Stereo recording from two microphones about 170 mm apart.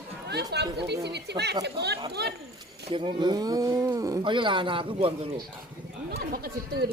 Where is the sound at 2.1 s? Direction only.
75° right (ahead or behind).